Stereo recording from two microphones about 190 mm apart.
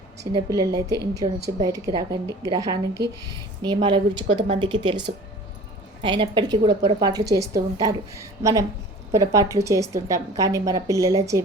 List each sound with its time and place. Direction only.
0.3 s a woman's voice: 20° right (ahead or behind)
3.0 s speech: 60° right (ahead or behind)
3.6 s a woman's voice: 25° right (ahead or behind)